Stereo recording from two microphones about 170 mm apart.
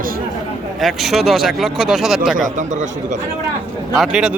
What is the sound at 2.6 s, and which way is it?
Speech, 45° right (ahead or behind).